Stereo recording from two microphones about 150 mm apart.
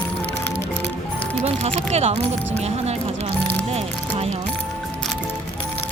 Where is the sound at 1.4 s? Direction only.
40° right (ahead or behind).